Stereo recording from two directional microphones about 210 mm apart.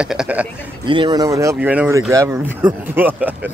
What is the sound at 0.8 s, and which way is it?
Speech, 20° right (ahead or behind).